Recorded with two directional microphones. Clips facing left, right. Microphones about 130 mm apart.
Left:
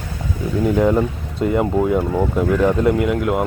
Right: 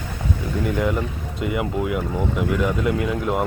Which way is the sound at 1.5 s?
35° left (ahead or behind).